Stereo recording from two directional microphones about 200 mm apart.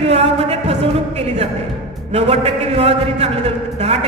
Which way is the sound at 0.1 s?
30° right (ahead or behind).